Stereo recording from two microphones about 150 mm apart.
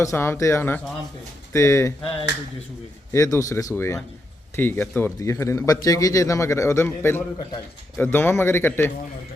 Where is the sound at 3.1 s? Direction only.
20° left (ahead or behind).